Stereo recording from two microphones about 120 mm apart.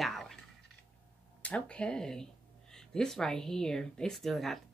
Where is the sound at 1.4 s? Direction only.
10° left (ahead or behind).